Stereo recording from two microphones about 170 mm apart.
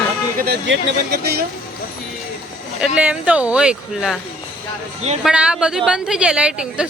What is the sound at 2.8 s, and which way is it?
A woman's voice, 5° right (ahead or behind).